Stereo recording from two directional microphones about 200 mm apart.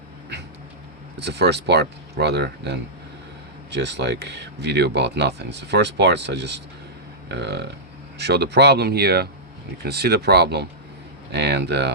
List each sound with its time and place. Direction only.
1.2 s speech: 55° right (ahead or behind)